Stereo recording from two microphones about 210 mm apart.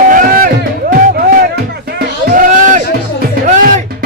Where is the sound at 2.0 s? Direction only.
45° right (ahead or behind).